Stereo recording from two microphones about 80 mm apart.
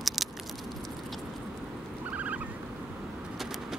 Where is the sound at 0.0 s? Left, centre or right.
Centre.